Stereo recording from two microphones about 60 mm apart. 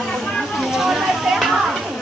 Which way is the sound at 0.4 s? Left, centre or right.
Centre.